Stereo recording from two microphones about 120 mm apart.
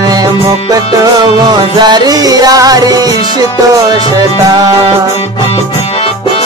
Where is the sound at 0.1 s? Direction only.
30° right (ahead or behind).